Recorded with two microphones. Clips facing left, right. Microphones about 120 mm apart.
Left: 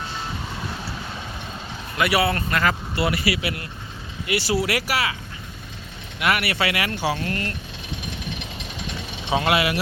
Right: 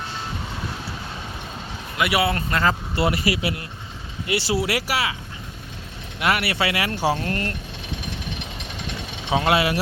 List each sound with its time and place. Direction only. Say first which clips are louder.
2.0 s speech: left 1 dB; 20° right (ahead or behind)
2.9 s speech: right 1 dB; 40° right (ahead or behind)
4.3 s speech: even; 25° right (ahead or behind)
6.1 s speech: even; 30° right (ahead or behind)
9.5 s speech: right 2 dB; 30° right (ahead or behind)